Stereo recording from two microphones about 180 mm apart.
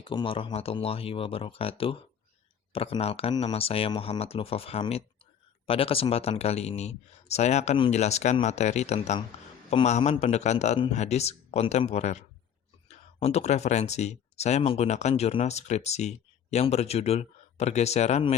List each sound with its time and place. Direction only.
0.0 s speech: 25° left (ahead or behind)